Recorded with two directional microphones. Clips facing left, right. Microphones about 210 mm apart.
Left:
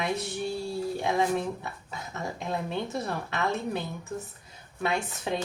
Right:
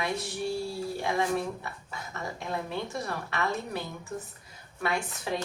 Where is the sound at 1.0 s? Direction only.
20° left (ahead or behind).